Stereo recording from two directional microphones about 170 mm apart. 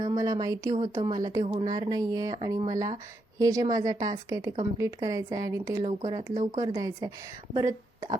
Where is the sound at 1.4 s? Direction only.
35° right (ahead or behind).